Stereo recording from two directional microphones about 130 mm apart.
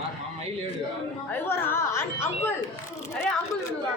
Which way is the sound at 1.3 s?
15° left (ahead or behind).